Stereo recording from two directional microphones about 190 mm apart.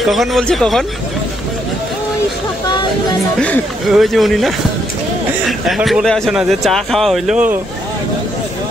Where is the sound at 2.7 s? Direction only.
25° left (ahead or behind).